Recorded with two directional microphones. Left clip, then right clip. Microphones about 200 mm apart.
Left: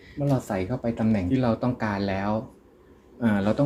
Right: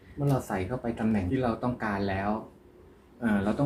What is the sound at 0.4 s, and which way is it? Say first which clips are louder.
Speech: left 4 dB; 40° left (ahead or behind).